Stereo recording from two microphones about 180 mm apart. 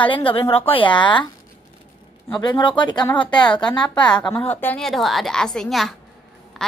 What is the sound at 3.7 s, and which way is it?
Speech, 25° left (ahead or behind).